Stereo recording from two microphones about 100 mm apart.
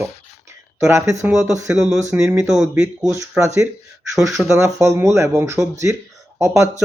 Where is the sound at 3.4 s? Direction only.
30° right (ahead or behind).